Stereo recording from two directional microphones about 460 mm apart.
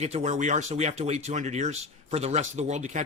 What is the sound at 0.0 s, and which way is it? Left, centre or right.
Speech, centre.